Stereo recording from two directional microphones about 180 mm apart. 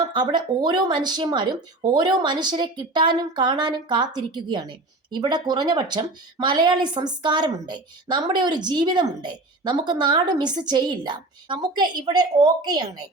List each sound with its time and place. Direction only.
0.0 s speech: 25° right (ahead or behind)